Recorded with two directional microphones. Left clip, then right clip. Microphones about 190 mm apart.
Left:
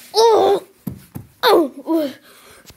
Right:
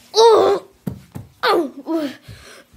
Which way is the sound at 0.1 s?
5° right (ahead or behind).